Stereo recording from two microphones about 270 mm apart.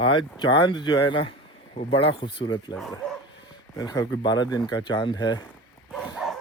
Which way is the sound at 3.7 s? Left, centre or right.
Centre.